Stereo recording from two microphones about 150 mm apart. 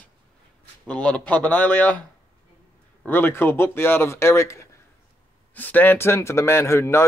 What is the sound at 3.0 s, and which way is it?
A man's voice, 15° left (ahead or behind).